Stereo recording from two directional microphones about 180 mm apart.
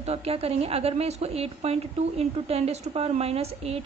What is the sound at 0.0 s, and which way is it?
A woman's voice, 35° right (ahead or behind).